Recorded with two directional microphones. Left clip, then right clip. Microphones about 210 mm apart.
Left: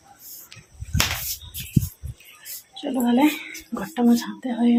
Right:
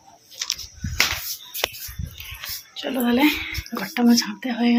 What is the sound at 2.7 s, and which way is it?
Speech, centre (ahead or behind).